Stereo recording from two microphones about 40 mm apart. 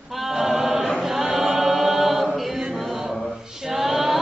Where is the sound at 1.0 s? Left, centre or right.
Centre.